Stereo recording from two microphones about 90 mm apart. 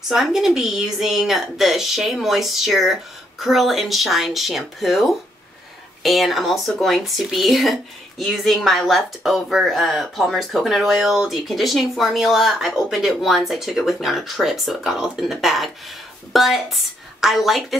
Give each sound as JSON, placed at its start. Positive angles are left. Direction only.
{"t": 0.1, "sound": "speech", "side_deg": -5}